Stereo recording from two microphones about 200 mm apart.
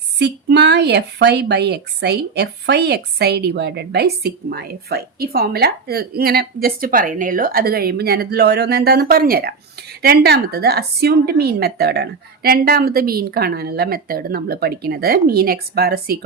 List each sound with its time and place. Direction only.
0.2 s speech: 55° right (ahead or behind)